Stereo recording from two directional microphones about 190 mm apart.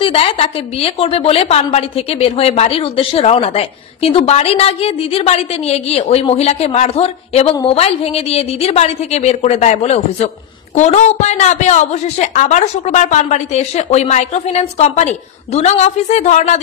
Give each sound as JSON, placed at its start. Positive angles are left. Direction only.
{"t": 0.0, "sound": "a woman's voice", "side_deg": 30}